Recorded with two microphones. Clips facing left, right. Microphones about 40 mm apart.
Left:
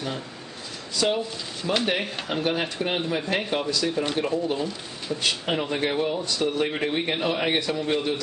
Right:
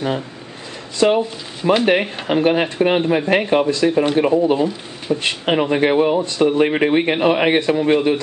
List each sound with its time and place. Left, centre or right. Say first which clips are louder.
0.9 s speech: right 9 dB; right
5.5 s speech: right 13 dB; right